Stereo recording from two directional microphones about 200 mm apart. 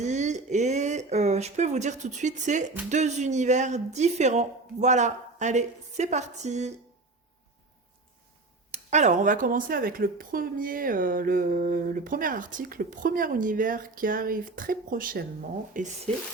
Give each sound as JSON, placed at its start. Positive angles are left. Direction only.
{"t": 0.0, "sound": "speech", "side_deg": -35}
{"t": 8.7, "sound": "speech", "side_deg": -35}